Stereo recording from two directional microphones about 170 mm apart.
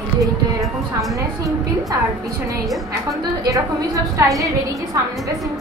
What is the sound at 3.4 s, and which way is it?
Speech, 20° right (ahead or behind).